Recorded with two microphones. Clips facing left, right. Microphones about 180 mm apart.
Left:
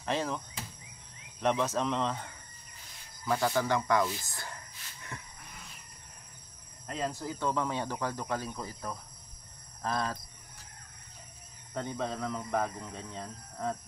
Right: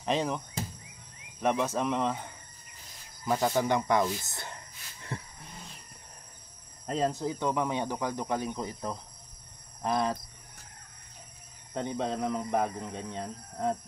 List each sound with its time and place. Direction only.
0.0 s speech: 15° right (ahead or behind)
1.4 s speech: 10° right (ahead or behind)
5.0 s wild animals: 30° right (ahead or behind)
7.1 s speech: 20° right (ahead or behind)
9.8 s cricket: 20° right (ahead or behind)
11.7 s speech: 25° right (ahead or behind)